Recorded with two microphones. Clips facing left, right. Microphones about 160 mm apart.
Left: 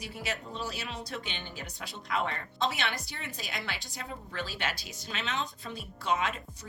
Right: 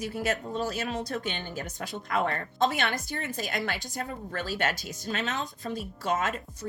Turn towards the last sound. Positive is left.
turn(degrees=-45)  # may be behind; listen again after turning